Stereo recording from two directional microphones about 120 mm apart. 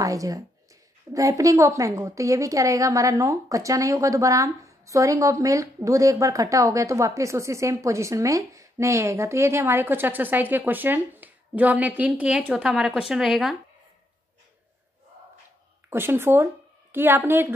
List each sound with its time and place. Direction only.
0.0 s a woman's voice: 30° right (ahead or behind); by 13.6 s centre (ahead or behind)
15.9 s a woman's voice: 20° right (ahead or behind)